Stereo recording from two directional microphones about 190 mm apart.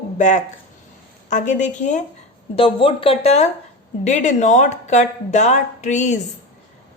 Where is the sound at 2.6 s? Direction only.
30° left (ahead or behind).